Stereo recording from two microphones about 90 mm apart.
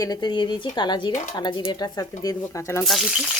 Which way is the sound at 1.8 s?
45° left (ahead or behind).